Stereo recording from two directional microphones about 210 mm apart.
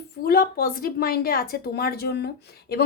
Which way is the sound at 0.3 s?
45° left (ahead or behind).